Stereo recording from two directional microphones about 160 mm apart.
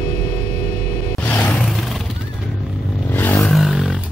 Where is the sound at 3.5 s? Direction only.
Centre (ahead or behind).